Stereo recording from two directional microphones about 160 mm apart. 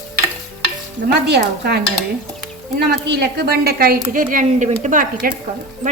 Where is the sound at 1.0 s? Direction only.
90° right.